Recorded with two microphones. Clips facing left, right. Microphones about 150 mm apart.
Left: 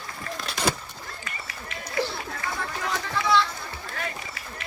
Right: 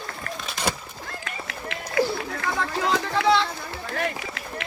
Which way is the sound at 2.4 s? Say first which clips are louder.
Right 6 dB; 70° right (ahead or behind).